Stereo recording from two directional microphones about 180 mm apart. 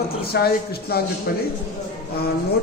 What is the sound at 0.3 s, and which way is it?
A woman's voice, 60° left (ahead or behind).